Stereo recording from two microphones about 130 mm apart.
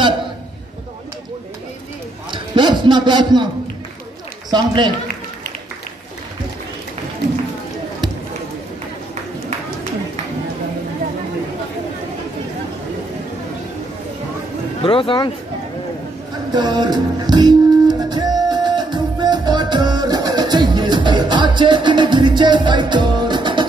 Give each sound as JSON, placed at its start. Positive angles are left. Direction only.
{"t": 2.3, "sound": "speech", "side_deg": -40}
{"t": 4.5, "sound": "a man's voice", "side_deg": -35}
{"t": 14.8, "sound": "speech", "side_deg": 45}
{"t": 16.5, "sound": "music", "side_deg": -35}